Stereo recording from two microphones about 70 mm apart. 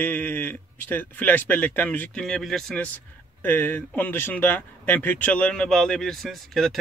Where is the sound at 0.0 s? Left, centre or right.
Left.